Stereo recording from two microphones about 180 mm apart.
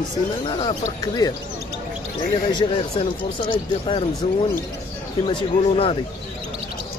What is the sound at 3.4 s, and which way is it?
Speech, 30° left (ahead or behind).